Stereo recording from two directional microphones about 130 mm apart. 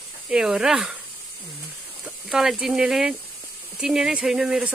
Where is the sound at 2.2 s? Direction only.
5° right (ahead or behind).